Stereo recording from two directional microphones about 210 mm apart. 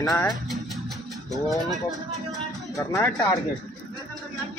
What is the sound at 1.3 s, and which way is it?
Speech, centre (ahead or behind).